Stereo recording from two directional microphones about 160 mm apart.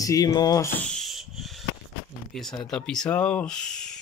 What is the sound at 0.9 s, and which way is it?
Rub, centre (ahead or behind).